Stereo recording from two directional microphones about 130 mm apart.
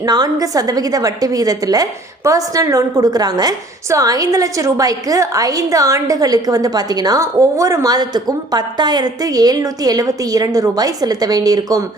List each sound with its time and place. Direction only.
0.0 s a woman's voice: 30° right (ahead or behind)